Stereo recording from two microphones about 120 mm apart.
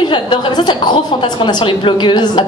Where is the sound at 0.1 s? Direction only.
40° left (ahead or behind).